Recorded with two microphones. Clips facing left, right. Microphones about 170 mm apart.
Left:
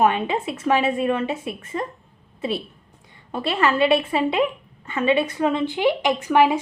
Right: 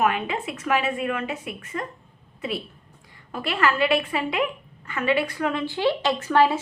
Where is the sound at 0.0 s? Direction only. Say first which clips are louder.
Left 4 dB; 25° left (ahead or behind).